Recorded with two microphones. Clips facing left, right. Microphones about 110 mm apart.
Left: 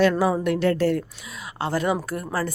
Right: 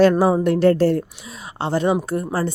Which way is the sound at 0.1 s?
25° right (ahead or behind).